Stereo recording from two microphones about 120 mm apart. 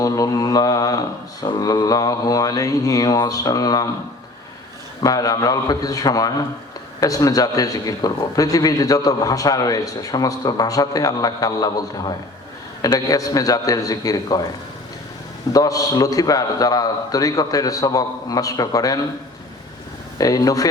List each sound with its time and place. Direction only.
0.0 s a man's voice: 30° left (ahead or behind)
5.0 s a man's voice: 30° left (ahead or behind)
15.5 s a man's voice: 30° left (ahead or behind)
20.1 s a man's voice: 30° left (ahead or behind)